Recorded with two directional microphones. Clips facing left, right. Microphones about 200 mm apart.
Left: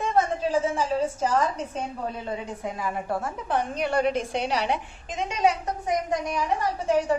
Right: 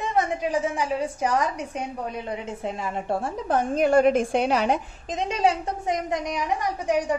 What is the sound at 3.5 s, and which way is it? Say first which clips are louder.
A woman's voice: right 6 dB; 45° right (ahead or behind).